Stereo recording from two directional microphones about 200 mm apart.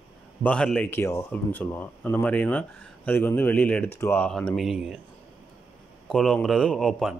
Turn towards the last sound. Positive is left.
turn(degrees=0)  # may be behind; listen again after turning